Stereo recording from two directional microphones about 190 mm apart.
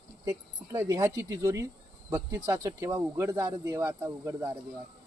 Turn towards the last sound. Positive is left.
turn(degrees=-15)  # may be behind; listen again after turning